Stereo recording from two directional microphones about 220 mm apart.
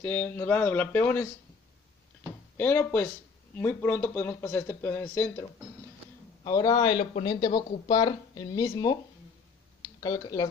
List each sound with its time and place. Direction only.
0.0 s speech: 10° left (ahead or behind)
2.5 s speech: 10° left (ahead or behind)
9.9 s speech: 15° left (ahead or behind)